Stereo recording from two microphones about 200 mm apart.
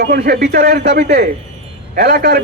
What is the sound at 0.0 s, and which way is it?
A man's voice, 50° right (ahead or behind).